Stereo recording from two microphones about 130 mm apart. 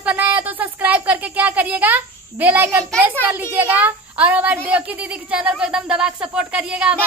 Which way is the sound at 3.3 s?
15° right (ahead or behind).